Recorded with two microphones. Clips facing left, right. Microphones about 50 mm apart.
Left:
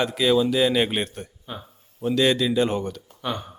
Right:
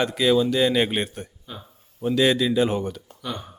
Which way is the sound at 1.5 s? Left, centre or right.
Centre.